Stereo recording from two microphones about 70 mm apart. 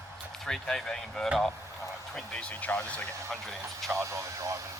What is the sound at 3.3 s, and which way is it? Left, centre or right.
Speech, centre.